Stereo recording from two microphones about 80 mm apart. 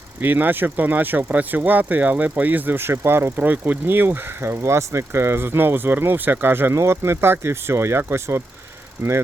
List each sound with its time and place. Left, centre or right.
0.2 s speech: right